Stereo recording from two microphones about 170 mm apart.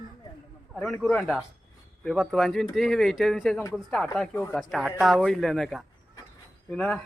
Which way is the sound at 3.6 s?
15° left (ahead or behind).